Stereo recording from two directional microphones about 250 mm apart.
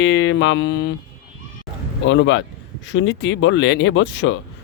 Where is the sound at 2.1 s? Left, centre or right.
Left.